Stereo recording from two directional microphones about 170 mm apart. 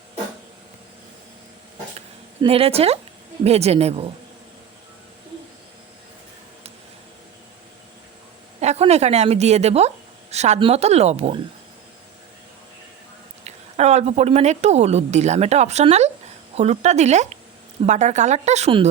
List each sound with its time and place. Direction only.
2.4 s speech: 35° right (ahead or behind)
8.6 s speech: 40° right (ahead or behind)
13.4 s a woman's voice: 40° right (ahead or behind)